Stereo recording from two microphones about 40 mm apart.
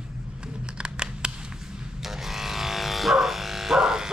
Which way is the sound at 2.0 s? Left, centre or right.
Centre.